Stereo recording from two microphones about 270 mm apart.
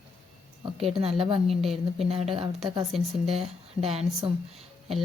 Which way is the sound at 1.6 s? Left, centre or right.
Centre.